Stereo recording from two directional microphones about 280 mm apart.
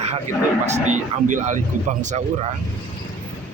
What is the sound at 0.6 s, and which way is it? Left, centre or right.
Speech, right.